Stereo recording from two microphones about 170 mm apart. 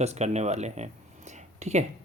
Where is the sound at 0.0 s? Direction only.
40° right (ahead or behind).